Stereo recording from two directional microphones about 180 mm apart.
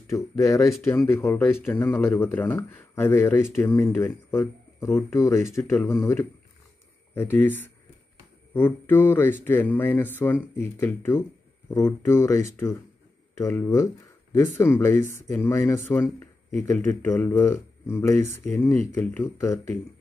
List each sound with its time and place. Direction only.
0.1 s speech: 15° left (ahead or behind)